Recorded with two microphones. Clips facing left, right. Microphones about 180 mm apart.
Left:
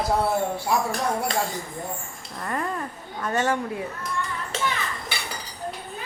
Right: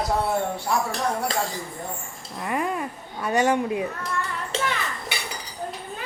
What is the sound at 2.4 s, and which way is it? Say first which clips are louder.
Speech: right 2 dB; 10° right (ahead or behind).